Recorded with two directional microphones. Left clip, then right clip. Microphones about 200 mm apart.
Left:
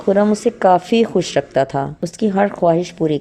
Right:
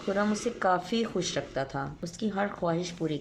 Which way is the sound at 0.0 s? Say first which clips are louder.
Left 14 dB; 35° left (ahead or behind).